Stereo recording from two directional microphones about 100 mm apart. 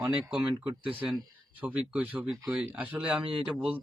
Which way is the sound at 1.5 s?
15° right (ahead or behind).